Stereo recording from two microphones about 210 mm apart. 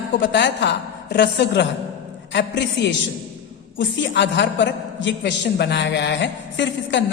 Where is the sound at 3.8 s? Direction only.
60° left (ahead or behind).